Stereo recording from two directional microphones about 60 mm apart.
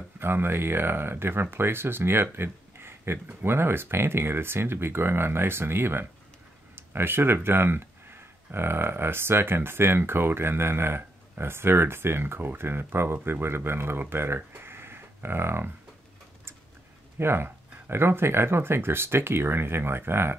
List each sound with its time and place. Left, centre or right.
0.2 s speech: right
14.5 s a sound: right
17.2 s speech: right